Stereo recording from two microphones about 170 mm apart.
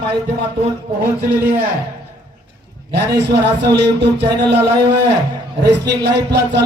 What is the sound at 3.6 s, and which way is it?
Speech, 80° right.